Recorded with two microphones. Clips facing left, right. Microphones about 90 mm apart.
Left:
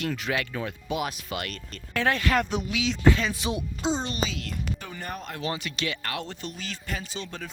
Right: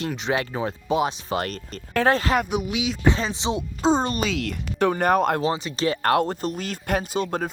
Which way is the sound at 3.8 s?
45° right (ahead or behind).